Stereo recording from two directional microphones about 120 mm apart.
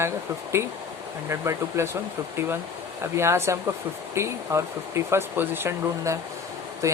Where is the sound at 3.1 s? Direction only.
20° right (ahead or behind).